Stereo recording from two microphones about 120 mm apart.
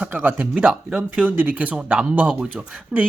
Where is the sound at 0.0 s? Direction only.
15° right (ahead or behind).